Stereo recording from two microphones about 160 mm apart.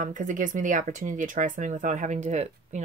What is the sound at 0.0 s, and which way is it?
Speech, 55° right (ahead or behind).